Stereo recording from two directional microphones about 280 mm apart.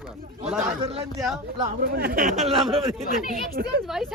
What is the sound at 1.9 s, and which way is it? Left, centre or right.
Speech, right.